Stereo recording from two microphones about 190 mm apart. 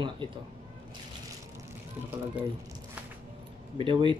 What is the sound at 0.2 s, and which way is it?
Speech, 25° right (ahead or behind).